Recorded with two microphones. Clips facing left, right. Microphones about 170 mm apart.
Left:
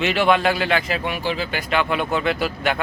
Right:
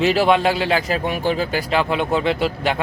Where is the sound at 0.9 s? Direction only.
45° right (ahead or behind).